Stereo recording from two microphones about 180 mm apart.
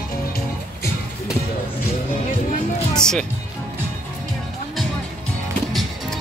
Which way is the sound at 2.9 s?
5° left (ahead or behind).